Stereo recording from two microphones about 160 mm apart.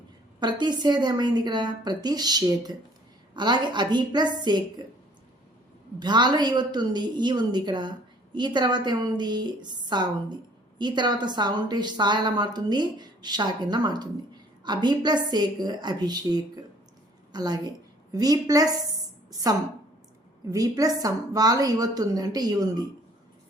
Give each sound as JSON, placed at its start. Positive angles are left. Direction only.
{"t": 0.3, "sound": "a woman's voice", "side_deg": -25}
{"t": 6.0, "sound": "a woman's voice", "side_deg": -25}